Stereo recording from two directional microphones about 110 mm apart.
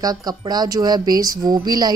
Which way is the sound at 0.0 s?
35° right (ahead or behind).